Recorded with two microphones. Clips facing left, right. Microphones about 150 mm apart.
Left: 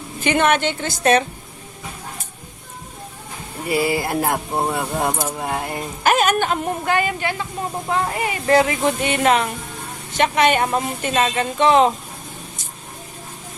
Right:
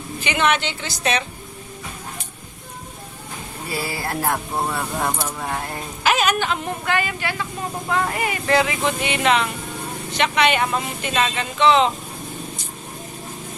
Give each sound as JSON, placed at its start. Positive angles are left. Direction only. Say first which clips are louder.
{"t": 0.3, "sound": "speech", "louder": "left 4 dB", "side_deg": 50}
{"t": 3.7, "sound": "speech", "louder": "left 7 dB", "side_deg": 15}
{"t": 5.5, "sound": "speech", "louder": "left 3 dB", "side_deg": 10}
{"t": 6.0, "sound": "speech", "louder": "left 3 dB", "side_deg": 50}
{"t": 7.2, "sound": "speech", "louder": "left 2 dB", "side_deg": 25}
{"t": 8.5, "sound": "speech", "louder": "left 4 dB", "side_deg": 40}